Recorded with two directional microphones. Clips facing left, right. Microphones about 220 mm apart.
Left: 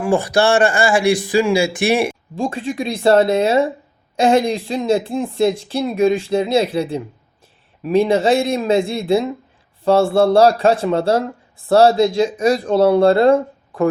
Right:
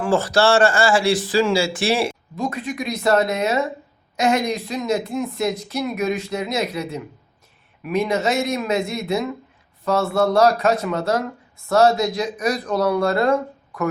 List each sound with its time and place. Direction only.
0.0 s speech: 15° left (ahead or behind)
2.3 s speech: 30° left (ahead or behind)